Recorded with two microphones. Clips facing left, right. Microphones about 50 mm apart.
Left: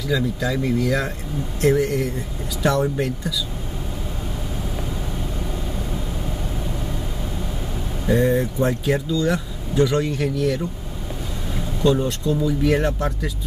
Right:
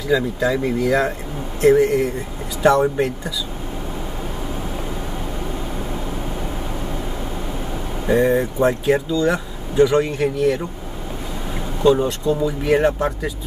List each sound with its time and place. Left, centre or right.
0.1 s speech: centre
8.1 s speech: centre